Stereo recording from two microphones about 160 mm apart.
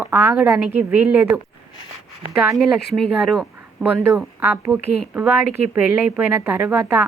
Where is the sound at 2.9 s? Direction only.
Centre (ahead or behind).